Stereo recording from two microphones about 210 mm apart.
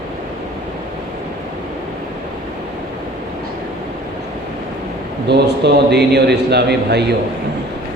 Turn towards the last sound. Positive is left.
turn(degrees=-50)  # may be behind; listen again after turning